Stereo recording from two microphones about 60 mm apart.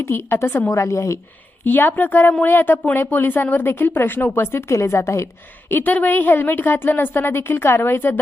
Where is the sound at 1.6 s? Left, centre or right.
Left.